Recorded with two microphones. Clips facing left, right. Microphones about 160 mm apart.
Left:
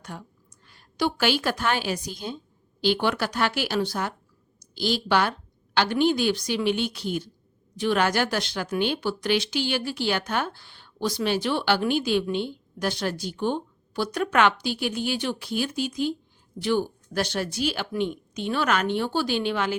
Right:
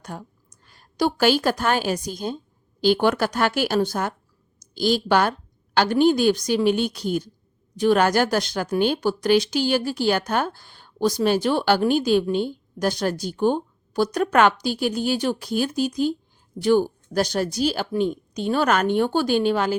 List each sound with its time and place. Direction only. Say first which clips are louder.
0.0 s a woman's voice: right 4 dB; 40° right (ahead or behind)